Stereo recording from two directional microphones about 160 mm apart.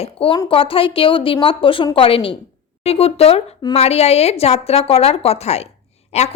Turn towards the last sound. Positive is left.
turn(degrees=45)  # may be behind; listen again after turning